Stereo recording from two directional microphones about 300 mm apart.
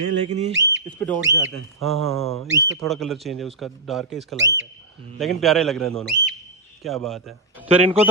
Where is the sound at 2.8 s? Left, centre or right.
Centre.